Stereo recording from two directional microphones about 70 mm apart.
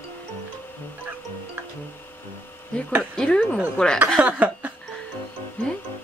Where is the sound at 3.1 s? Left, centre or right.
Centre.